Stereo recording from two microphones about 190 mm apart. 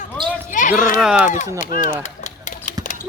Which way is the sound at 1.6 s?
40° left (ahead or behind).